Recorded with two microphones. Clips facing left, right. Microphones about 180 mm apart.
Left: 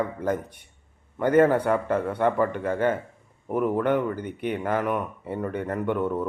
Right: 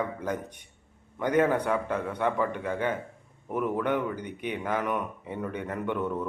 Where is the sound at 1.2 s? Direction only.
50° left (ahead or behind).